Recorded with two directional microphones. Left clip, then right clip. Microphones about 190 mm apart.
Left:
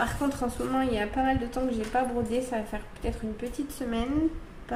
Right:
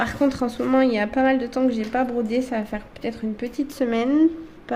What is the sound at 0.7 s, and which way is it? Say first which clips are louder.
A woman's voice: right 10 dB; 60° right (ahead or behind).